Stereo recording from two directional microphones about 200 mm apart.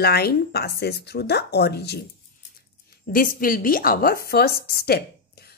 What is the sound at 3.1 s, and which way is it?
A woman's voice, 45° left (ahead or behind).